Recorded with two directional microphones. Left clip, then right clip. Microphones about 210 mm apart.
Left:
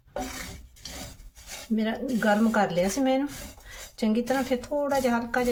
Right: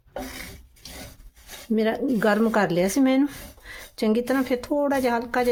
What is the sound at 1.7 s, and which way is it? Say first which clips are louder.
Speech: right 6 dB; 50° right (ahead or behind).